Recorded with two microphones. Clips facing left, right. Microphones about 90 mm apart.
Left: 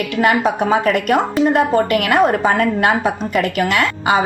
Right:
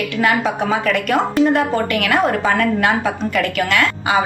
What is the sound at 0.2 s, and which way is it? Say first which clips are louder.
A woman's voice: left 3 dB; 35° left (ahead or behind).